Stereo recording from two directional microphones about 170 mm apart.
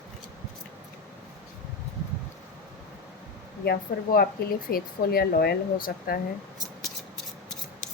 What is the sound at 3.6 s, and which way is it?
Speech, 65° left (ahead or behind).